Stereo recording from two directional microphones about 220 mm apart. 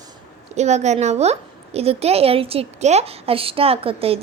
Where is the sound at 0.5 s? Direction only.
30° right (ahead or behind).